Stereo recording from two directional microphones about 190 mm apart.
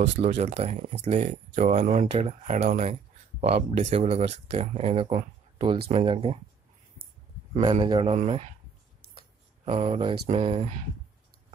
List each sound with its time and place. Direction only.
0.0 s speech: 35° right (ahead or behind)
7.6 s a man's voice: 30° right (ahead or behind)
9.7 s a man's voice: 30° right (ahead or behind)